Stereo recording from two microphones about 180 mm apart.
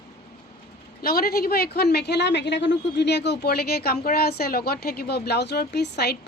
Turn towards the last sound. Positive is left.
turn(degrees=65)  # may be behind; listen again after turning